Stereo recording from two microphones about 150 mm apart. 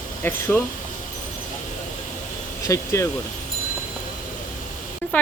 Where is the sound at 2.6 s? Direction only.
20° left (ahead or behind).